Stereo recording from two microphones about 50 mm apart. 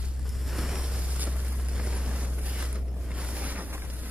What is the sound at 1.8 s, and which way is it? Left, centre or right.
Vehicle, right.